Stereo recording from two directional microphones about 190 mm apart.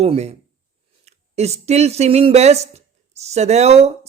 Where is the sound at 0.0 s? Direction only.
35° right (ahead or behind).